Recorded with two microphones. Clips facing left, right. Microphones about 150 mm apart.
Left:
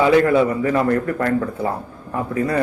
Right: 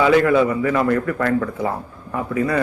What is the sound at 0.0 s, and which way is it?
Speech, 30° left (ahead or behind).